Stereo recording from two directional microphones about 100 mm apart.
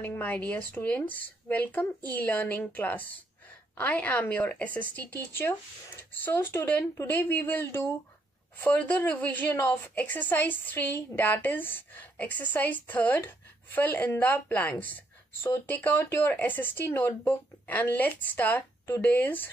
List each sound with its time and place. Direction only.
0.0 s a woman's voice: 20° left (ahead or behind)